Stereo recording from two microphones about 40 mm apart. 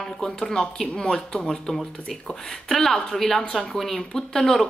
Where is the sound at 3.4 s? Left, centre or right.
Left.